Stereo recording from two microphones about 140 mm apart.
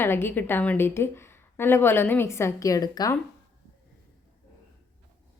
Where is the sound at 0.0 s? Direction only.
15° left (ahead or behind).